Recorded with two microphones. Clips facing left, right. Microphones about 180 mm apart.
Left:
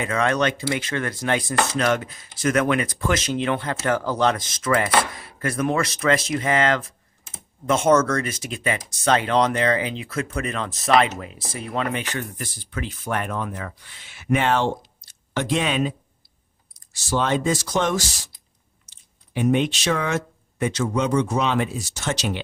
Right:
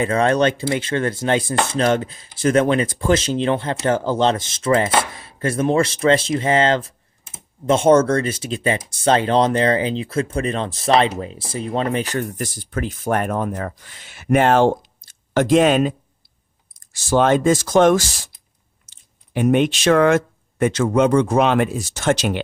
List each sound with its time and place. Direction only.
0.0 s chopping: 35° right (ahead or behind)
7.7 s speech: 30° right (ahead or behind); by 22.4 s 50° right (ahead or behind)